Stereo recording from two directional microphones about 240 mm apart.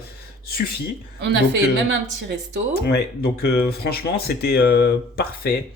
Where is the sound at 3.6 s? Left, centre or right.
Left.